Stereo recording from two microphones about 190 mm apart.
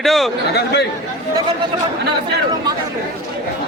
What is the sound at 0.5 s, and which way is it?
Speech, 60° left (ahead or behind).